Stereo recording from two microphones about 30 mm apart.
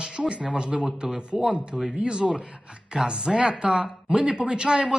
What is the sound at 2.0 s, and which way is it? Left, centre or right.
A man's voice, right.